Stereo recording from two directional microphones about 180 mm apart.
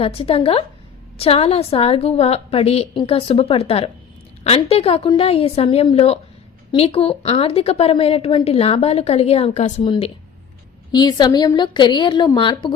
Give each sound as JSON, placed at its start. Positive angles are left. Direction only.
{"t": 0.0, "sound": "a woman's voice", "side_deg": 30}
{"t": 10.9, "sound": "a woman's voice", "side_deg": 20}